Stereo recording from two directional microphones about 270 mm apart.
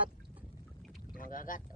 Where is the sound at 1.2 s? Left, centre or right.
Left.